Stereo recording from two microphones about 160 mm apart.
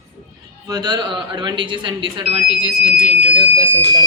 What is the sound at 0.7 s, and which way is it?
Speech, 25° right (ahead or behind).